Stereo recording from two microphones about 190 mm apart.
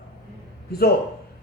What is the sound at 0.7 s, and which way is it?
Speech, 55° left (ahead or behind).